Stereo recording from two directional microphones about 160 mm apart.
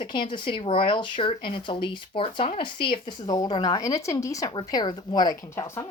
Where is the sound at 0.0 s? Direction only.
30° left (ahead or behind).